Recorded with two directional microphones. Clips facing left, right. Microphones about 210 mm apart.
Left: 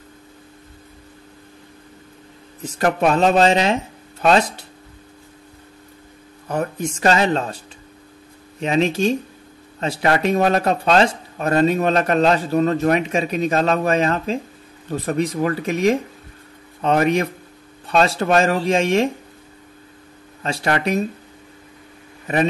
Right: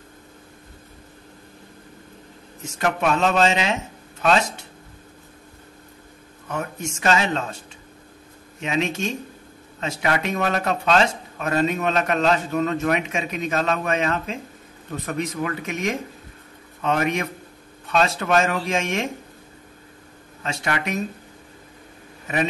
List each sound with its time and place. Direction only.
2.6 s speech: 35° left (ahead or behind)
6.5 s speech: 35° left (ahead or behind)
8.5 s speech: 35° left (ahead or behind)
20.4 s speech: 35° left (ahead or behind)